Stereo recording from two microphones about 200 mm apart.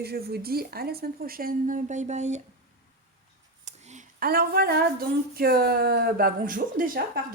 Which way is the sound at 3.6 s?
35° right (ahead or behind).